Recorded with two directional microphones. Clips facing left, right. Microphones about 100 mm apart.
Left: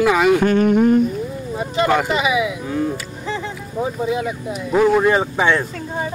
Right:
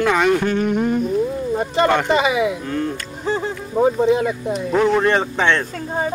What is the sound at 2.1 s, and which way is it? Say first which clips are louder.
Speech: right 2 dB; 40° right (ahead or behind).